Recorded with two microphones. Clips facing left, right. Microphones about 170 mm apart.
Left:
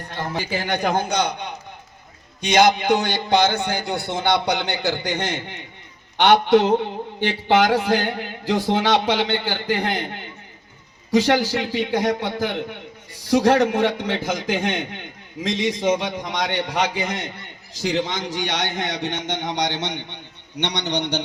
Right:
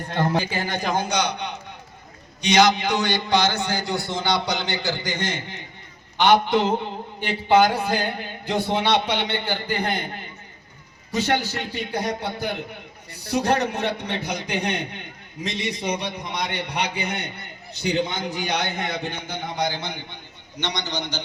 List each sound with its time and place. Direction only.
0.7 s a man's voice: 60° left (ahead or behind)
6.1 s a man's voice: 70° left (ahead or behind)
7.2 s a man's voice: 90° left; by 21.2 s 65° left (ahead or behind)